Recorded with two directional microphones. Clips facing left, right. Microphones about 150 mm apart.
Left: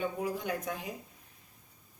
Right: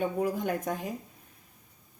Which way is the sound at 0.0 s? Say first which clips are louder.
Right 5 dB; 50° right (ahead or behind).